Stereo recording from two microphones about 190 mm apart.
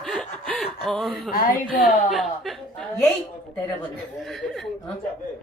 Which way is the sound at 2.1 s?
Centre (ahead or behind).